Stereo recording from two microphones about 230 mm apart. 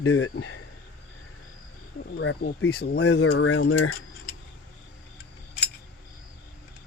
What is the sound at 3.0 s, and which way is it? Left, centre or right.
Speech, left.